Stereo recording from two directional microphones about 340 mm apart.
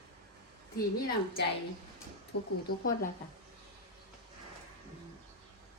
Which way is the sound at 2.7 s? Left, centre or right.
Left.